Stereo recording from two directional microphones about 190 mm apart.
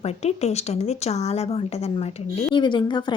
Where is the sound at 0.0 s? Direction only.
35° left (ahead or behind).